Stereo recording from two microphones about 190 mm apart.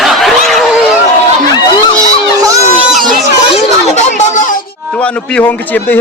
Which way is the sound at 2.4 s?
15° right (ahead or behind).